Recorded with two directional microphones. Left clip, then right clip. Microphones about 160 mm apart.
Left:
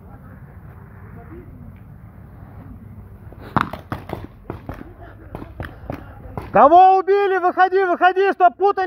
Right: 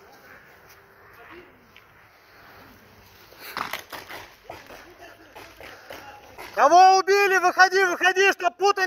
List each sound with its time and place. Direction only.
6.6 s a man's voice: 15° left (ahead or behind)